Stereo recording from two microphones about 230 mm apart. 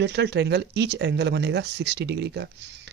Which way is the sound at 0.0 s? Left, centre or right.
Right.